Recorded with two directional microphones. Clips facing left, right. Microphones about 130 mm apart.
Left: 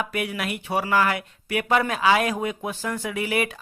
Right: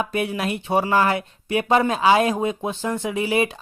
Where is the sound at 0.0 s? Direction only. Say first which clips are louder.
Right 4 dB; 25° right (ahead or behind).